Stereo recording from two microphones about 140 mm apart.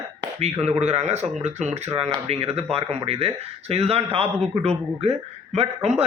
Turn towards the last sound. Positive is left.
turn(degrees=-50)  # may be behind; listen again after turning